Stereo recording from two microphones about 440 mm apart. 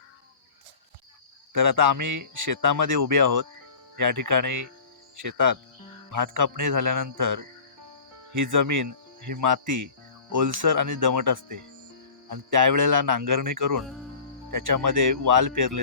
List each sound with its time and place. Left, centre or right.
1.5 s speech: right